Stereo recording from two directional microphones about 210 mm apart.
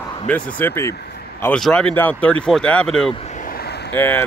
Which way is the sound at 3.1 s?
35° left (ahead or behind).